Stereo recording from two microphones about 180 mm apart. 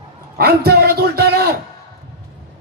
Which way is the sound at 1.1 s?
65° right (ahead or behind).